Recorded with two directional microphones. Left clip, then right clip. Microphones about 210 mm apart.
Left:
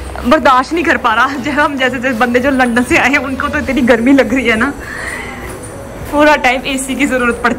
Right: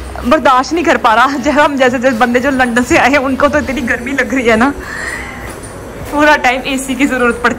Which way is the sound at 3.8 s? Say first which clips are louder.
Left 5 dB; 15° left (ahead or behind).